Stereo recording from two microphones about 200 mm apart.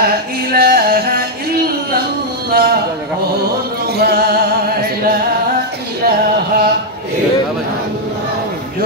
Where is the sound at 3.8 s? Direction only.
55° right (ahead or behind).